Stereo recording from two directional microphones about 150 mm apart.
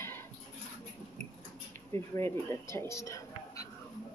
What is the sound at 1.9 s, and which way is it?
Speech, 15° left (ahead or behind).